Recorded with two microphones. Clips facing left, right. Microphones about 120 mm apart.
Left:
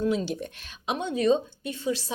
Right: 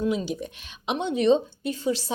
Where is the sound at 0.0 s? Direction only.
10° right (ahead or behind).